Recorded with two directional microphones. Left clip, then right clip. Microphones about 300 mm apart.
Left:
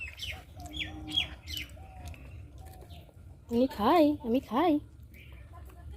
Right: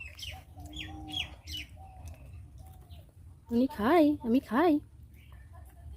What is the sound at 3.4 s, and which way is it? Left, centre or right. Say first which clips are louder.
A woman's voice: left 2 dB; centre.